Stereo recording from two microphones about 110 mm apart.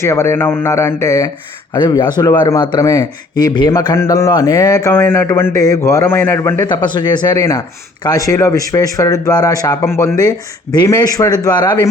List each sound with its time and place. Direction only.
0.0 s speech: 25° left (ahead or behind); by 3.7 s 40° left (ahead or behind)
3.9 s speech: 25° left (ahead or behind)
6.7 s speech: 45° left (ahead or behind)